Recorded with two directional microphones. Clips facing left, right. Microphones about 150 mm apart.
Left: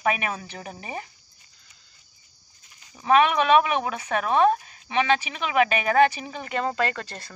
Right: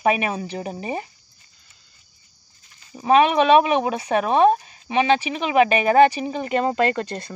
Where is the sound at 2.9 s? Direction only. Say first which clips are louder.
Right 3 dB; 25° right (ahead or behind).